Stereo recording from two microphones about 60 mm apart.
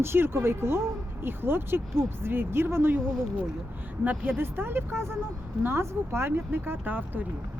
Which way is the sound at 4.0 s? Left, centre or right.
Right.